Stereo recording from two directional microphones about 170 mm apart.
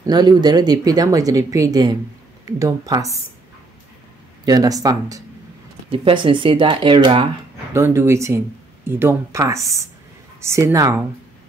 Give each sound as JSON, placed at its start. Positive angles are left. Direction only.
{"t": 0.0, "sound": "speech", "side_deg": -25}
{"t": 4.5, "sound": "speech", "side_deg": -20}
{"t": 7.7, "sound": "speech", "side_deg": -15}